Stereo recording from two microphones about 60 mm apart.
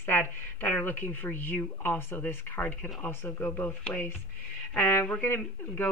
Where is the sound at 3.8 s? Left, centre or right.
Left.